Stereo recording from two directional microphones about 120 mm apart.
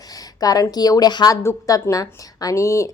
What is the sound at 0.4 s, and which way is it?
A woman's voice, 30° left (ahead or behind).